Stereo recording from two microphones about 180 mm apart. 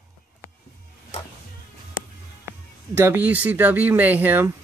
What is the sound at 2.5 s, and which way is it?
Speech, 15° right (ahead or behind).